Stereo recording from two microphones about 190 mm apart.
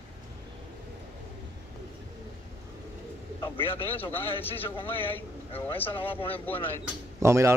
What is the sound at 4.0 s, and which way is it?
Speech, 10° left (ahead or behind).